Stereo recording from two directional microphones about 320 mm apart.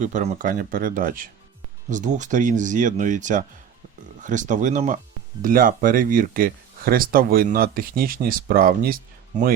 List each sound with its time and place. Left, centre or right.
0.0 s speech: right